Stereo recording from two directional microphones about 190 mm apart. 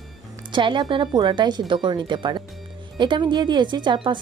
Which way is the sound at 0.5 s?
25° right (ahead or behind).